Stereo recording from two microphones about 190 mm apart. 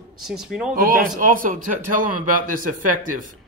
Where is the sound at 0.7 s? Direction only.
45° right (ahead or behind).